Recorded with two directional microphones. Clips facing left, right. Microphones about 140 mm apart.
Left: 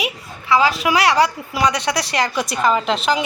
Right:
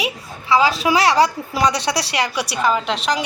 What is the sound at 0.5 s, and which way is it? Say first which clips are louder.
A woman's voice: even; 30° right (ahead or behind).